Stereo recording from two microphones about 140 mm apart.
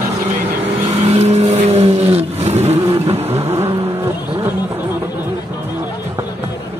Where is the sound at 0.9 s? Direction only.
50° right (ahead or behind).